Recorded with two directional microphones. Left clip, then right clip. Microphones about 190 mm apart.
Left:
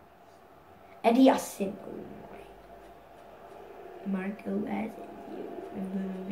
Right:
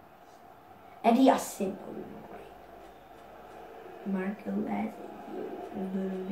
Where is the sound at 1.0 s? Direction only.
40° left (ahead or behind).